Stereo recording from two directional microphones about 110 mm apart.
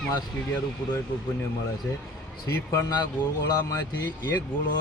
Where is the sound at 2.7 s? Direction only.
30° left (ahead or behind).